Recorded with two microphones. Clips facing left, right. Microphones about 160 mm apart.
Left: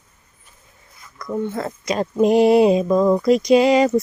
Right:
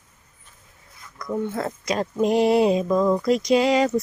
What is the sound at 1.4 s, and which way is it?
Speech, 5° right (ahead or behind).